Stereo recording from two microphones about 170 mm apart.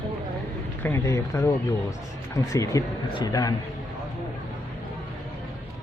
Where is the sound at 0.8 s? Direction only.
15° left (ahead or behind).